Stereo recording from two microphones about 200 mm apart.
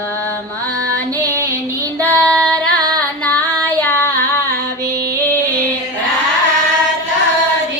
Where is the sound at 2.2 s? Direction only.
5° left (ahead or behind).